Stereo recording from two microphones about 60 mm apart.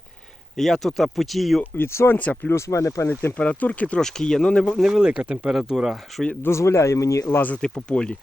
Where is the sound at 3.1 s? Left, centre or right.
Left.